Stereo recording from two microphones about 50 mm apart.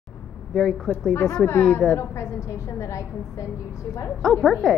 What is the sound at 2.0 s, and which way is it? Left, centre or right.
A woman's voice, left.